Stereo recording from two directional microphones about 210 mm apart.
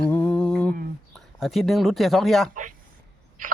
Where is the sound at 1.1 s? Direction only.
Centre (ahead or behind).